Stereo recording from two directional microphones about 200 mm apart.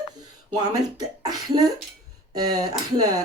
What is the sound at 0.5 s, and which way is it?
Speech, 20° right (ahead or behind).